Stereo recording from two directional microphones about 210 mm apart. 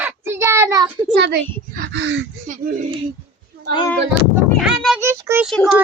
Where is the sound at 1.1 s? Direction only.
55° right (ahead or behind).